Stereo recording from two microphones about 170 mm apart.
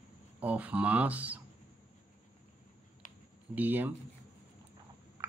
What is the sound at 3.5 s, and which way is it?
Speech, 10° right (ahead or behind).